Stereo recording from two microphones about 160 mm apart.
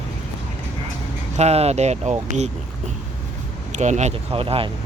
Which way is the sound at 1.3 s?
40° right (ahead or behind).